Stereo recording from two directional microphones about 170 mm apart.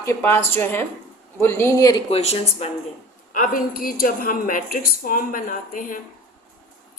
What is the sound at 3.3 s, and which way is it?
A woman's voice, 55° left (ahead or behind).